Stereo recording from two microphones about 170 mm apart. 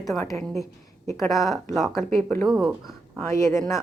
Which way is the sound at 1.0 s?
15° left (ahead or behind).